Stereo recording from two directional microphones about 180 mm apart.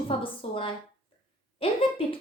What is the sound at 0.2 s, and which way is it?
A woman's voice, 30° left (ahead or behind).